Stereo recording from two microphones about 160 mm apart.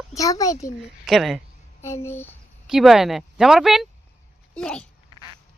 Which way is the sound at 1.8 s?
15° left (ahead or behind).